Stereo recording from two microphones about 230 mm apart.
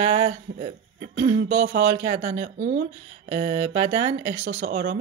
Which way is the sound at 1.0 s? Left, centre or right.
Right.